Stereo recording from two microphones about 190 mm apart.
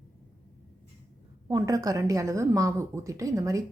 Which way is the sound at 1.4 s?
15° right (ahead or behind).